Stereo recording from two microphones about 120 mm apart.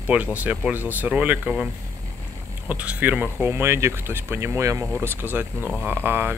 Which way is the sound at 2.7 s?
10° right (ahead or behind).